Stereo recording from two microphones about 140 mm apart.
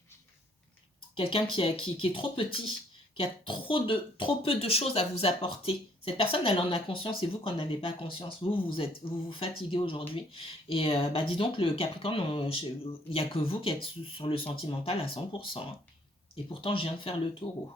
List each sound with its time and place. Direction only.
1.1 s speech: 40° left (ahead or behind)